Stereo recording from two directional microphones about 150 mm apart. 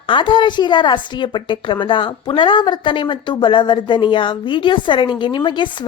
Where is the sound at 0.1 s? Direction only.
35° left (ahead or behind).